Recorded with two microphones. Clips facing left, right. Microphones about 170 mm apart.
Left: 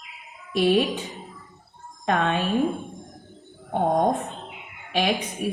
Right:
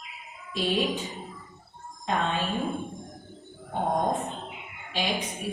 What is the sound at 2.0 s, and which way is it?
Speech, 65° left (ahead or behind).